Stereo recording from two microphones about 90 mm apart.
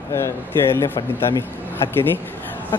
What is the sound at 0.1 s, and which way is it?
Speech, 30° left (ahead or behind).